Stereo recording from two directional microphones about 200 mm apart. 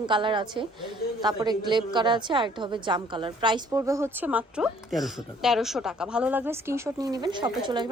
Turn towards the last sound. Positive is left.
turn(degrees=-20)  # may be behind; listen again after turning